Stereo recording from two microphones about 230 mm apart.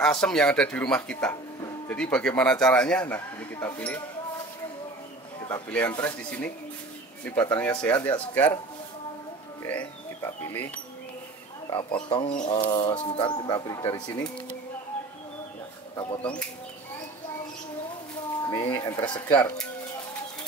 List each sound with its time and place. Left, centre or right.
0.0 s a man's voice: centre
5.5 s speech: centre
7.5 s speech: centre
9.7 s speech: centre
12.1 s speech: left
16.0 s speech: left
18.5 s speech: centre
19.3 s speech: centre